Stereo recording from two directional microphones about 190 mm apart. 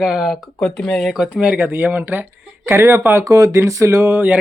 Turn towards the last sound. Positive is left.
turn(degrees=-10)  # may be behind; listen again after turning